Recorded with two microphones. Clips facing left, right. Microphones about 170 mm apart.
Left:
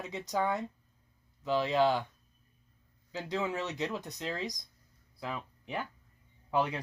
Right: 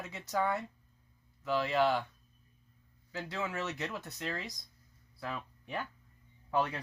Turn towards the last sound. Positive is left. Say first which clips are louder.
# left 2 dB
turn(degrees=15)  # may be behind; listen again after turning